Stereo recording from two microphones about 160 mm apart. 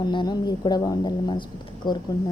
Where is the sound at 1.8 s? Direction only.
25° left (ahead or behind).